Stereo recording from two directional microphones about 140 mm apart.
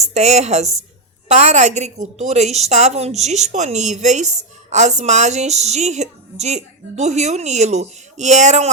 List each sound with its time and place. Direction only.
0.0 s a woman's voice: 50° right (ahead or behind)